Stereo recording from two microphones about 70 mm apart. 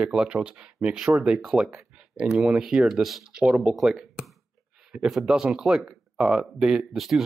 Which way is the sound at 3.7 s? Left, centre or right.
Centre.